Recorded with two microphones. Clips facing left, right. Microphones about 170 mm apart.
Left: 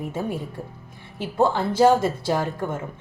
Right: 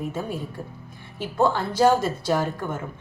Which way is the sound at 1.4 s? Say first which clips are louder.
Left 2 dB; 25° left (ahead or behind).